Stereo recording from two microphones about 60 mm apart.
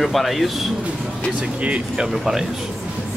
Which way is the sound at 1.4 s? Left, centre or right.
Centre.